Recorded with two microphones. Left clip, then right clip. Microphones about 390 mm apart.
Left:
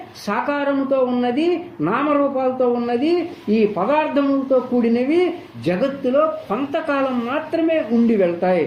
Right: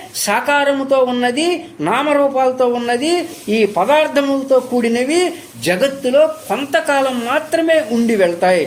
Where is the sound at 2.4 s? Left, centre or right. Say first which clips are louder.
Right 4 dB; right.